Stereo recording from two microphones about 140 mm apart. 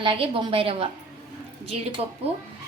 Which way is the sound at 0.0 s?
40° right (ahead or behind).